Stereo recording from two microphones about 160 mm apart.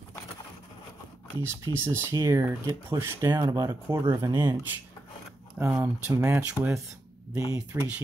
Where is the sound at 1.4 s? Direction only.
15° right (ahead or behind).